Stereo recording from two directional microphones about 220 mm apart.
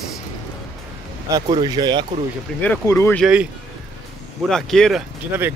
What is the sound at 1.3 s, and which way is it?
Speech, 20° right (ahead or behind).